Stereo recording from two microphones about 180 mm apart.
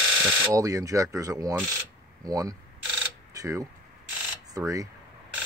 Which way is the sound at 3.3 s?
20° right (ahead or behind).